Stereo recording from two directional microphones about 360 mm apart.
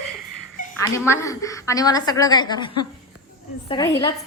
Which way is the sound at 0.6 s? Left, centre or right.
Left.